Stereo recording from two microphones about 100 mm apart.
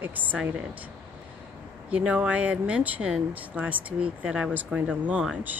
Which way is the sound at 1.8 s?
10° right (ahead or behind).